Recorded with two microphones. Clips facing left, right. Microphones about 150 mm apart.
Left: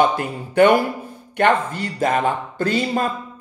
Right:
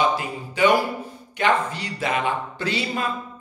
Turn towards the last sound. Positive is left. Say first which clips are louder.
# left 6 dB
turn(degrees=45)  # may be behind; listen again after turning